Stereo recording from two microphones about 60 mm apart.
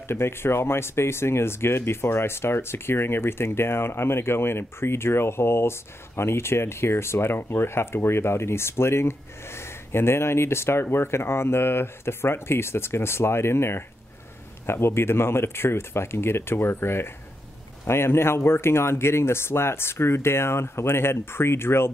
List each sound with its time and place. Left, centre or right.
0.1 s speech: left